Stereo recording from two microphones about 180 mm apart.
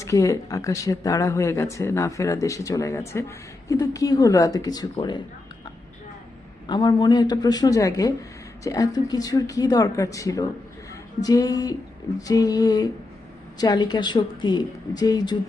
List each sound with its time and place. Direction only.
0.0 s a woman's voice: 15° left (ahead or behind)
6.7 s a woman's voice: 25° left (ahead or behind)